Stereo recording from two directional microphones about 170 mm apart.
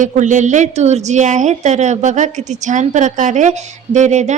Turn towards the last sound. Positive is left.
turn(degrees=-45)  # may be behind; listen again after turning